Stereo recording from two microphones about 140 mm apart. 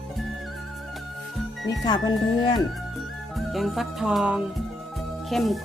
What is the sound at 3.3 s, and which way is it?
Music, centre (ahead or behind).